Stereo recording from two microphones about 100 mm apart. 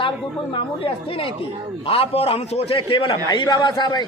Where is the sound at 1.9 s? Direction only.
80° left.